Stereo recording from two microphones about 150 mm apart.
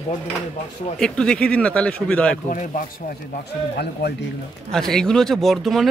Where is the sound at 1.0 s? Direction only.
5° left (ahead or behind).